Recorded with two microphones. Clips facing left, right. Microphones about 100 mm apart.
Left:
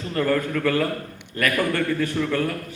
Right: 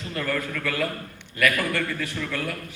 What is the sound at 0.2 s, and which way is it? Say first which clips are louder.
Speech: left 7 dB; 30° left (ahead or behind).